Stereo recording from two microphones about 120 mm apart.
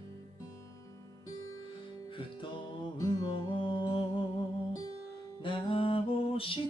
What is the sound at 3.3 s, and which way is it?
Mantra, 40° left (ahead or behind).